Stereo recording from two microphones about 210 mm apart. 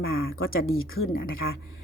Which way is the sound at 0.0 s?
70° left (ahead or behind).